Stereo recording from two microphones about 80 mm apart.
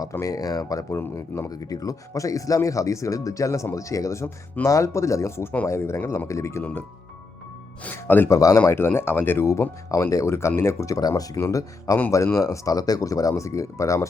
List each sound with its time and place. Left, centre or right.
0.1 s speech: left
0.9 s speech: left
1.5 s speech: left
7.9 s speech: left
8.3 s speech: left
8.6 s speech: left
11.3 s speech: left